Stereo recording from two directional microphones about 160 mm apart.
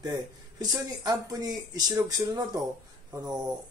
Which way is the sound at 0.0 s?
25° right (ahead or behind).